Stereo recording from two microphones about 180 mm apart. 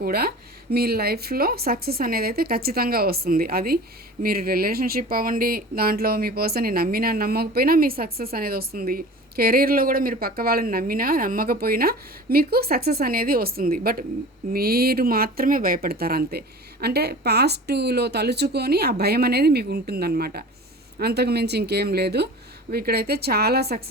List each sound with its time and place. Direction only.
0.0 s speech: 60° right (ahead or behind)